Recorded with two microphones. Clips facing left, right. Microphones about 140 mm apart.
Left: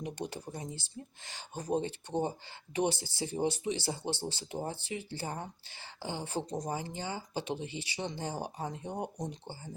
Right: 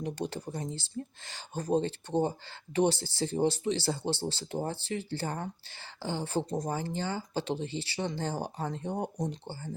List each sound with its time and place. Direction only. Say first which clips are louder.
0.0 s speech: right 4 dB; 15° left (ahead or behind)
8.9 s speech: right 5 dB; 25° right (ahead or behind)
9.3 s speech: right 4 dB; 15° left (ahead or behind)